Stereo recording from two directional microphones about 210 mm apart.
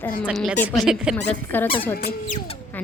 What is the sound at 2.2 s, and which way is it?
Speech, 35° left (ahead or behind).